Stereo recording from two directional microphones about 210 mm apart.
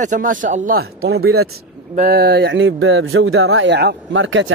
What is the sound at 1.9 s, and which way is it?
Speech, 45° right (ahead or behind).